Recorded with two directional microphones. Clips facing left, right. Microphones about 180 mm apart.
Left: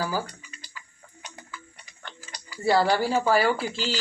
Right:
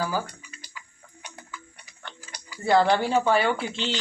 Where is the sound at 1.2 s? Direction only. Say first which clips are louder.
Even; 10° right (ahead or behind).